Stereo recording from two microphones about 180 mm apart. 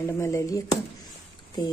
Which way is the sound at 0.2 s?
15° left (ahead or behind).